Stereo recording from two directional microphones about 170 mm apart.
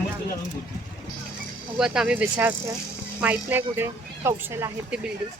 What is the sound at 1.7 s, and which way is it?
A woman's voice, 5° right (ahead or behind).